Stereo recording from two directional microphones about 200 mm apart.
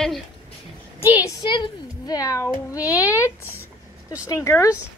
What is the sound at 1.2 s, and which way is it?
A child's voice, 20° left (ahead or behind).